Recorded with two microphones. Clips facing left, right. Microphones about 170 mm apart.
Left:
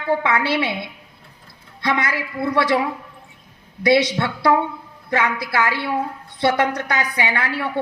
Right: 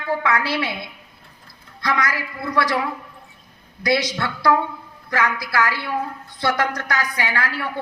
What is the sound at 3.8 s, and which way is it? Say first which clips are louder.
A woman's voice: left 5 dB; 25° left (ahead or behind).